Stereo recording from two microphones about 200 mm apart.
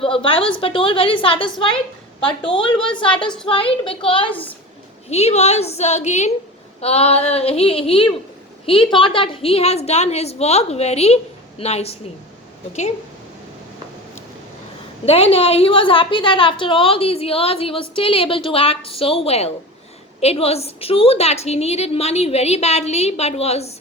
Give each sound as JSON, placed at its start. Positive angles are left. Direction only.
{"t": 0.0, "sound": "a woman's voice", "side_deg": 25}
{"t": 15.0, "sound": "a woman's voice", "side_deg": 30}